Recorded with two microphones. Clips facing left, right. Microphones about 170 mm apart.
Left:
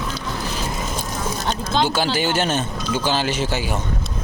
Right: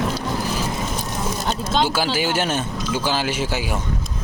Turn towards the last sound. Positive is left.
turn(degrees=-10)  # may be behind; listen again after turning